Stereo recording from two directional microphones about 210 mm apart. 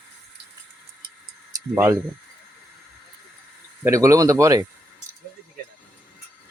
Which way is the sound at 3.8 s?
15° right (ahead or behind).